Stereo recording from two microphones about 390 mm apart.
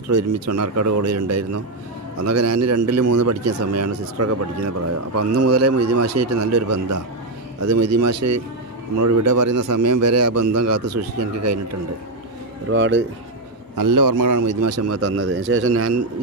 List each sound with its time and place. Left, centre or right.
0.4 s a man's voice: right
12.7 s speech: right
13.7 s a man's voice: right